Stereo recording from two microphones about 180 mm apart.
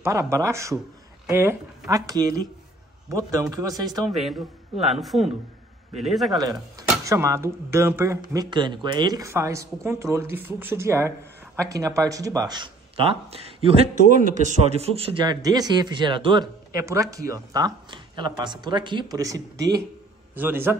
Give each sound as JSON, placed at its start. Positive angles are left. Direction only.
{"t": 0.0, "sound": "a man's voice", "side_deg": -15}
{"t": 4.1, "sound": "a man's voice", "side_deg": 0}
{"t": 6.3, "sound": "a man's voice", "side_deg": -20}